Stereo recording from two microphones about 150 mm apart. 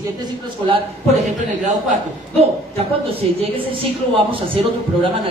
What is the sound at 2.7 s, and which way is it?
Speech, 40° right (ahead or behind).